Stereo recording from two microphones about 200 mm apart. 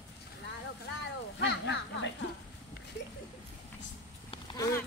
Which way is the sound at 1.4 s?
60° left (ahead or behind).